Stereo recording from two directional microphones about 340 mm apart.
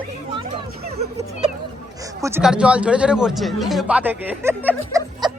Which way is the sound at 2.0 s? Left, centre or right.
Centre.